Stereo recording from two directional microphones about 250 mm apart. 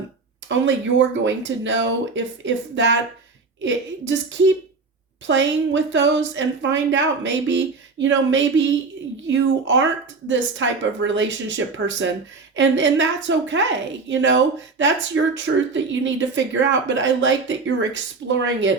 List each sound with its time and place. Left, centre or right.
0.4 s speech: right